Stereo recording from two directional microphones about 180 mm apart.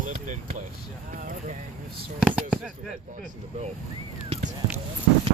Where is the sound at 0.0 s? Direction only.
45° right (ahead or behind).